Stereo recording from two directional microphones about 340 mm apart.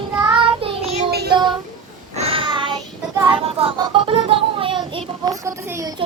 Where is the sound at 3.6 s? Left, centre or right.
Centre.